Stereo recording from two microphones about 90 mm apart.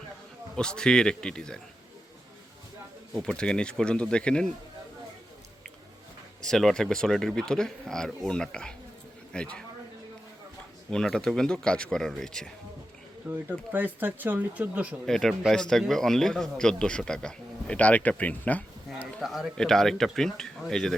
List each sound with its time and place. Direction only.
0.5 s a man's voice: 10° left (ahead or behind)
3.2 s a man's voice: 10° left (ahead or behind)
6.4 s a man's voice: 5° left (ahead or behind)
10.9 s a man's voice: 5° left (ahead or behind)
13.3 s speech: 20° right (ahead or behind)
15.0 s a man's voice: 5° left (ahead or behind)
19.2 s speech: centre (ahead or behind)